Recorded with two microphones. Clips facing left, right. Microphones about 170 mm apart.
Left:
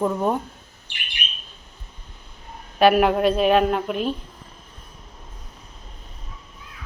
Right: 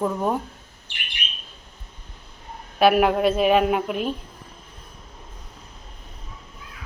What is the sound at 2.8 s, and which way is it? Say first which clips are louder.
Speech: left 1 dB; 5° right (ahead or behind).